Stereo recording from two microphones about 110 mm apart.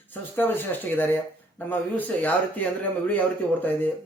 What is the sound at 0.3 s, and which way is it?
Speech, 20° left (ahead or behind).